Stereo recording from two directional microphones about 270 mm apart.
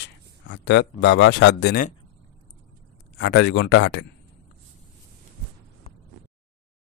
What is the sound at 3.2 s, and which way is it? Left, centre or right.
Speech, left.